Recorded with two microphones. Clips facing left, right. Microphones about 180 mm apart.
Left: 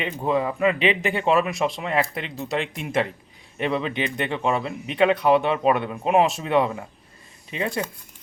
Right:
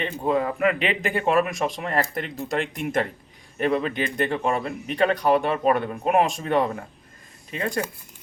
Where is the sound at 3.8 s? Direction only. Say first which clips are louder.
Even; 45° right (ahead or behind).